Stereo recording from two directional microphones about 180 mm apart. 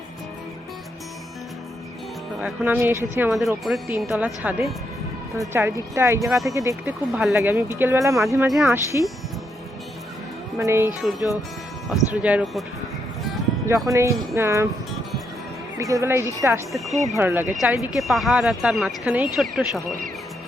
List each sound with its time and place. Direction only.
2.4 s speech: 10° right (ahead or behind)
3.3 s speech: centre (ahead or behind); by 6.9 s 15° right (ahead or behind)
7.1 s speech: centre (ahead or behind)
7.3 s speech: 15° right (ahead or behind)
8.4 s speech: centre (ahead or behind)
8.7 s speech: 15° right (ahead or behind)
10.6 s speech: 15° right (ahead or behind)
11.0 s speech: centre (ahead or behind)
13.8 s speech: 15° right (ahead or behind)
15.8 s speech: 15° right (ahead or behind)